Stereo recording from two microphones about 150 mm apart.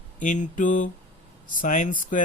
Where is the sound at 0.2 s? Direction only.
60° left (ahead or behind).